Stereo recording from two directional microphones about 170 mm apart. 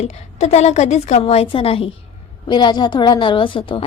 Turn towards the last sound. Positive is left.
turn(degrees=30)  # may be behind; listen again after turning